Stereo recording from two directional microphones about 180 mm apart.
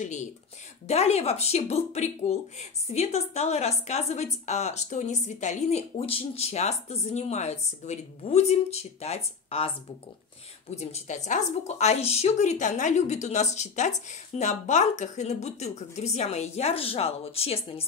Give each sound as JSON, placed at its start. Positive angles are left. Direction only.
{"t": 0.0, "sound": "a woman's voice", "side_deg": 40}
{"t": 10.8, "sound": "a woman's voice", "side_deg": 40}